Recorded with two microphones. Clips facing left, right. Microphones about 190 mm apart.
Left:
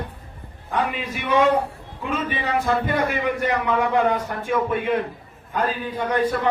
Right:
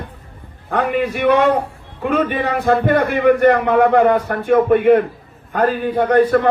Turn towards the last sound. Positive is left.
turn(degrees=-55)  # may be behind; listen again after turning